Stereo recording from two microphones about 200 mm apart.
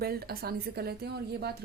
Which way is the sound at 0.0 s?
50° right (ahead or behind).